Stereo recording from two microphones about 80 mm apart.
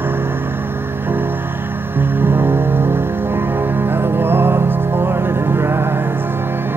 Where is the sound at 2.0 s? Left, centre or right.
Right.